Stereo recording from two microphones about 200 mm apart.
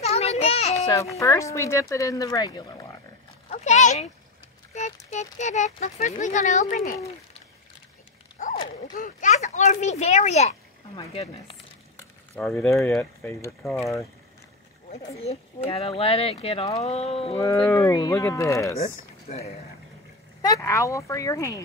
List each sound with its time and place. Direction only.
0.0 s a sound: 30° left (ahead or behind)
0.7 s speech: 15° left (ahead or behind)
3.4 s speech: 35° left (ahead or behind)
8.4 s a sound: 40° left (ahead or behind)
8.9 s speech: 40° left (ahead or behind)
12.4 s speech: centre (ahead or behind)
13.0 s speech: 15° left (ahead or behind)
15.7 s speech: 30° left (ahead or behind)
17.6 s speech: 15° left (ahead or behind)
18.8 s speech: 30° left (ahead or behind)
20.4 s speech: 15° left (ahead or behind)